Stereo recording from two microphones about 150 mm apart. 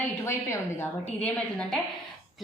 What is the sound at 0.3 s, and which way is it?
A woman's voice, 15° left (ahead or behind).